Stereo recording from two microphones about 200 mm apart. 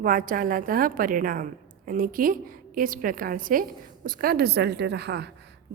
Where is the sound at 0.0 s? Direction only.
45° right (ahead or behind).